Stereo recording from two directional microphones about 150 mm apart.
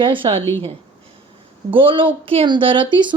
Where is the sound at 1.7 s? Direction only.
35° right (ahead or behind).